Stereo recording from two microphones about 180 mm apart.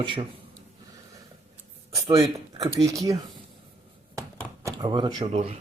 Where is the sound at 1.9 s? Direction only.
20° right (ahead or behind).